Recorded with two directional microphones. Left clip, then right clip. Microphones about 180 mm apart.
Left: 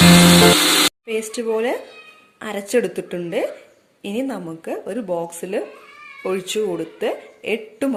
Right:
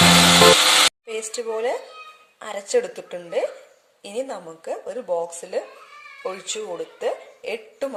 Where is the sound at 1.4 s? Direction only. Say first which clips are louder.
Left 2 dB; centre (ahead or behind).